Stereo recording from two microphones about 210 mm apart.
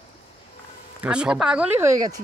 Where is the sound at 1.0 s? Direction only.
5° right (ahead or behind).